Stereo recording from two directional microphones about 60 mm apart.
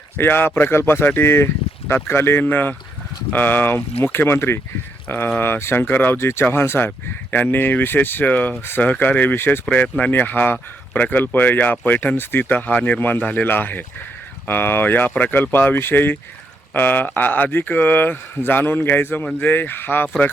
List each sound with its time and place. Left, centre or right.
0.2 s speech: left
5.0 s speech: left